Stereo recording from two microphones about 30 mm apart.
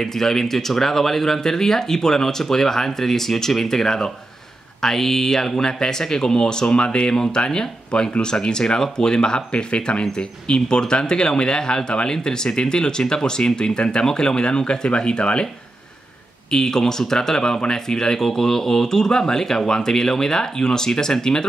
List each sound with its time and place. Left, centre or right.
0.0 s speech: centre
9.5 s speech: left
16.5 s speech: centre